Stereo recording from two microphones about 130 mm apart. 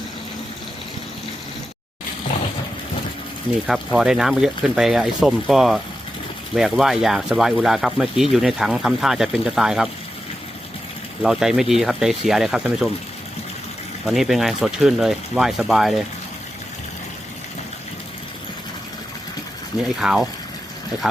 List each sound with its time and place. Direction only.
3.7 s speech: 5° right (ahead or behind)
11.2 s speech: 5° right (ahead or behind)
14.1 s speech: centre (ahead or behind)
20.0 s speech: 5° right (ahead or behind)